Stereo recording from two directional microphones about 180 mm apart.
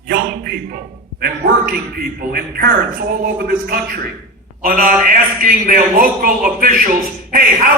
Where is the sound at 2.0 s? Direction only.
55° right (ahead or behind).